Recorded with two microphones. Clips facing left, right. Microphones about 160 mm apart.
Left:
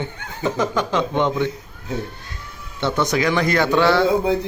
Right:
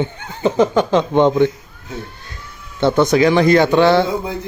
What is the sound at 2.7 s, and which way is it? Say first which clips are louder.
Speech: right 7 dB; 35° right (ahead or behind).